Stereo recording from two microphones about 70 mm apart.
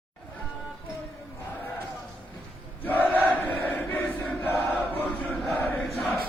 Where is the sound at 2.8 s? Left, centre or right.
Left.